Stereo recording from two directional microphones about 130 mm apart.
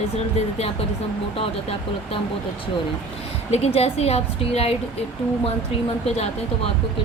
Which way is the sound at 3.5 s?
50° left (ahead or behind).